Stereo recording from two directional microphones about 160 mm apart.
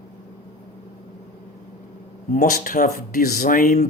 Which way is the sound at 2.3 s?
55° left (ahead or behind).